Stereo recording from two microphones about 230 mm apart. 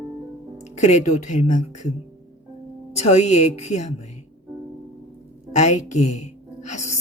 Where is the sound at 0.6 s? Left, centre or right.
Left.